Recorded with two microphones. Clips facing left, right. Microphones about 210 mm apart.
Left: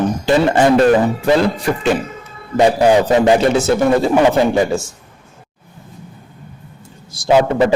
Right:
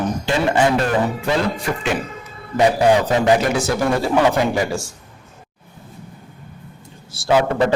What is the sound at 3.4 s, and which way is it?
Speech, 25° left (ahead or behind).